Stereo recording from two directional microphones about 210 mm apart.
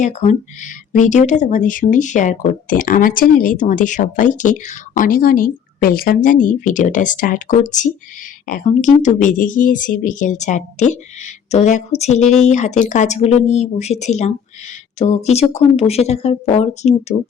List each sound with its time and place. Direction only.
0.0 s speech: 35° left (ahead or behind)